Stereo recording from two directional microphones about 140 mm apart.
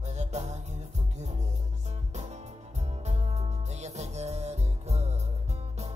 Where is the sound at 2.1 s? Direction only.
50° right (ahead or behind).